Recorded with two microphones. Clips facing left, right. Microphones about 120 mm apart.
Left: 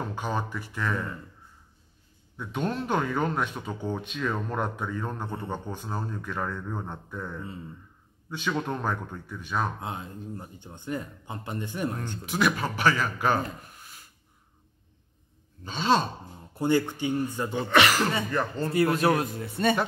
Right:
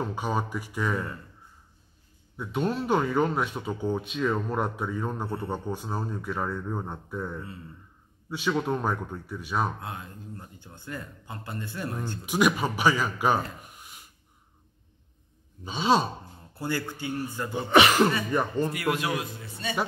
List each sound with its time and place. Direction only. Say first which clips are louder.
0.0 s speech: right 2 dB; 10° right (ahead or behind)
2.3 s speech: right 2 dB; 5° right (ahead or behind)
9.8 s speech: left 3 dB; 25° left (ahead or behind)
12.3 s speech: right 2 dB; 10° right (ahead or behind)
15.6 s speech: right 1 dB; 10° right (ahead or behind)
16.5 s speech: left 7 dB; 20° left (ahead or behind)
17.6 s speech: right 3 dB; 15° right (ahead or behind)
18.7 s a man's voice: left 5 dB; 30° left (ahead or behind)
19.4 s speech: left 9 dB; 55° left (ahead or behind)